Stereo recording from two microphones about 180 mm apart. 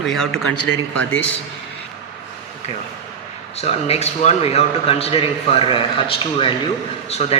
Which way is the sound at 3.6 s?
35° left (ahead or behind).